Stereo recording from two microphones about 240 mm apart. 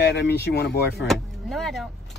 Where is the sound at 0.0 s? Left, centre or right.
Left.